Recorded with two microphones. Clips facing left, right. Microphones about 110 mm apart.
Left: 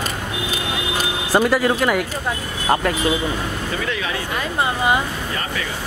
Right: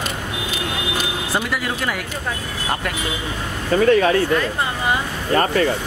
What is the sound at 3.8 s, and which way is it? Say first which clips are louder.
Speech: right 15 dB; 45° right (ahead or behind).